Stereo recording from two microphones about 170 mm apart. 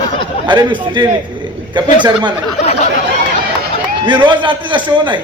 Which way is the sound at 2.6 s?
40° left (ahead or behind).